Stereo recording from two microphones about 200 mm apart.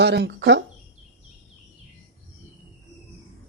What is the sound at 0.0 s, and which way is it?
Speech, 60° right (ahead or behind).